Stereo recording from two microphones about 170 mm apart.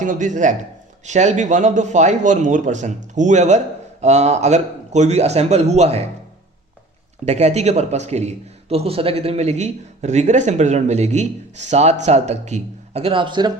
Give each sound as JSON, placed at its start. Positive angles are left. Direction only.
{"t": 0.0, "sound": "a man's voice", "side_deg": -50}
{"t": 7.3, "sound": "a man's voice", "side_deg": -40}